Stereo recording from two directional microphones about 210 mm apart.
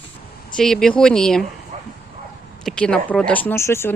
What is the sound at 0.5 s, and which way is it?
Speech, centre (ahead or behind).